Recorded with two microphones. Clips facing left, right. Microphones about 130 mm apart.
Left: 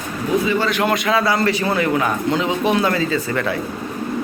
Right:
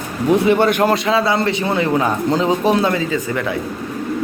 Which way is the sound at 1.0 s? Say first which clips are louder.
Right 1 dB; 25° right (ahead or behind).